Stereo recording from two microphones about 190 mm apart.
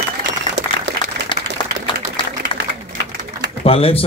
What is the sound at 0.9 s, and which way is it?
Applause, 65° right (ahead or behind).